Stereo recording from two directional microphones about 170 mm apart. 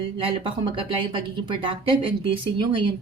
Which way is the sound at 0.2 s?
30° right (ahead or behind).